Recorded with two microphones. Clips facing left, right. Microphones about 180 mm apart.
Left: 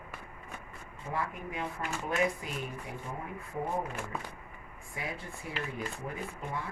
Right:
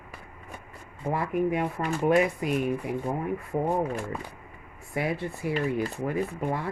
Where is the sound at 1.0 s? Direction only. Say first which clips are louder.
Right 10 dB; 65° right (ahead or behind).